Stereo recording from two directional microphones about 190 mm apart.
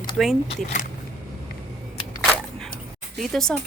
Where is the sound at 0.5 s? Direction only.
40° left (ahead or behind).